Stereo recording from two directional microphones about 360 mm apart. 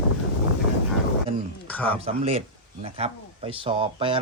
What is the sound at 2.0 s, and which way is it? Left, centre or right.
A man's voice, centre.